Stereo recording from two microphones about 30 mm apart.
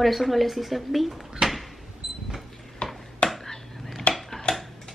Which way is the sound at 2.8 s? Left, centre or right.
Left.